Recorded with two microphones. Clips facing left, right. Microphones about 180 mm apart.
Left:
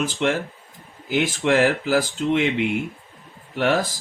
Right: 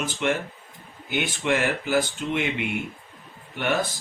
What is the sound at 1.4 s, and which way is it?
Speech, 80° left.